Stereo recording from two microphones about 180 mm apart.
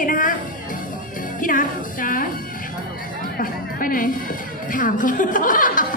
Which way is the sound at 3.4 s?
50° left (ahead or behind).